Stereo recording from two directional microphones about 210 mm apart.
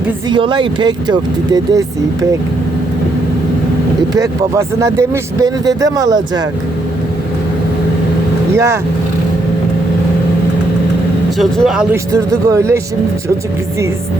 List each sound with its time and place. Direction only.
0.3 s speech: 25° right (ahead or behind)
4.1 s speech: 15° right (ahead or behind)
8.5 s speech: 15° right (ahead or behind)
11.3 s speech: centre (ahead or behind)
12.1 s speech: 15° right (ahead or behind)